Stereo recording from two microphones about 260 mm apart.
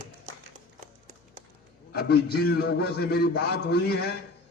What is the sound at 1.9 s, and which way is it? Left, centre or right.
A man's voice, left.